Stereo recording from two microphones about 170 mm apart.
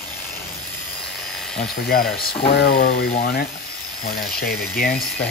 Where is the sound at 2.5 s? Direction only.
65° left (ahead or behind).